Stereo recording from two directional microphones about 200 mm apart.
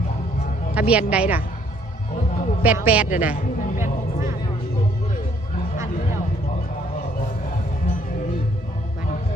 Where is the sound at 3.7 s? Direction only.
40° left (ahead or behind).